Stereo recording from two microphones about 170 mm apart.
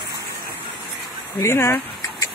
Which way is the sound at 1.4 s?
15° left (ahead or behind).